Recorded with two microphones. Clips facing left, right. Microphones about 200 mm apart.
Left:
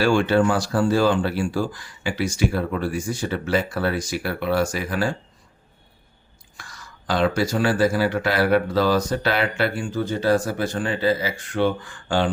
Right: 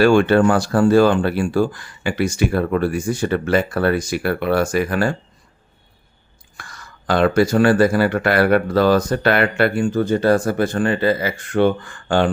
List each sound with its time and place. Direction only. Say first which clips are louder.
0.0 s speech: right 5 dB; 55° right (ahead or behind)
6.6 s speech: right 3 dB; 55° right (ahead or behind)